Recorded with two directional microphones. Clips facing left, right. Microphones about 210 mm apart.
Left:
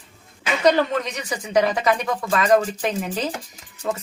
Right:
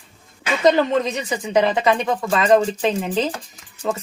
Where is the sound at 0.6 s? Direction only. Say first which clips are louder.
Right 3 dB; 25° right (ahead or behind).